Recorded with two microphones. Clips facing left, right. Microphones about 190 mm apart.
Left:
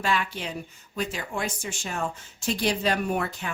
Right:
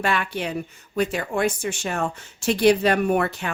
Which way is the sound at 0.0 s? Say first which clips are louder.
Right 3 dB; 60° right (ahead or behind).